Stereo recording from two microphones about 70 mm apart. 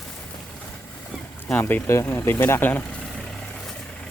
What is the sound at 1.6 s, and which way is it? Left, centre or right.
Speech, left.